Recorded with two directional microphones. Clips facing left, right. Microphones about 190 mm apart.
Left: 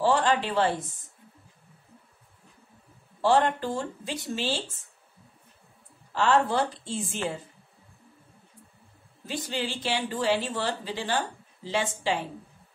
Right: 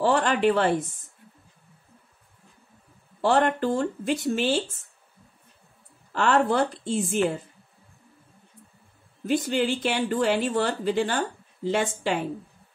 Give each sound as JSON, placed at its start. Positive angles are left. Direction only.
{"t": 0.0, "sound": "speech", "side_deg": -60}
{"t": 3.3, "sound": "speech", "side_deg": -60}
{"t": 6.1, "sound": "speech", "side_deg": -55}
{"t": 9.2, "sound": "speech", "side_deg": -55}